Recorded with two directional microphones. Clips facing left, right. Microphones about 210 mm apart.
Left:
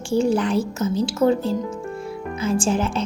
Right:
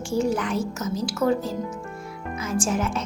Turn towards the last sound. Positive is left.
turn(degrees=30)  # may be behind; listen again after turning